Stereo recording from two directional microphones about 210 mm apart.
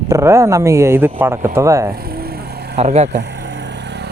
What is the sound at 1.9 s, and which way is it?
Vehicle, 45° right (ahead or behind).